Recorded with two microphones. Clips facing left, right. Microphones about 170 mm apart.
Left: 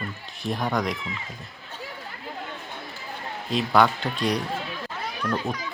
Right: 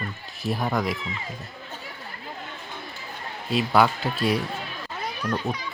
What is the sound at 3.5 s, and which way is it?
Speech, 5° right (ahead or behind).